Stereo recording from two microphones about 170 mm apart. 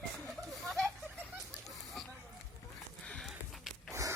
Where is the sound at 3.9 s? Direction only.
20° right (ahead or behind).